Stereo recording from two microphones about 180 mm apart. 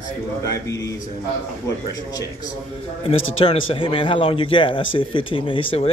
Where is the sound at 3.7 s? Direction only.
30° left (ahead or behind).